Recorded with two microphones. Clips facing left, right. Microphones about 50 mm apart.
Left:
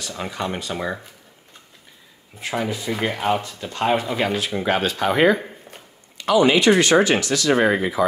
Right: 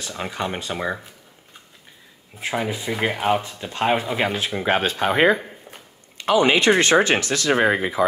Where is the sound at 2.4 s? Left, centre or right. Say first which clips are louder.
Even; right.